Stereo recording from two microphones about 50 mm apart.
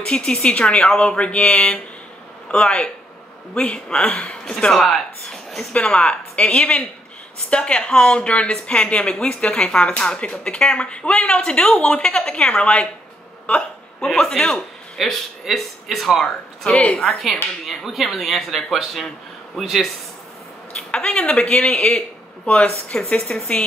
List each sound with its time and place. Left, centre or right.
0.0 s a woman's voice: centre
4.7 s speech: centre
5.7 s a woman's voice: left
15.0 s a woman's voice: centre
17.6 s speech: centre
20.9 s a woman's voice: centre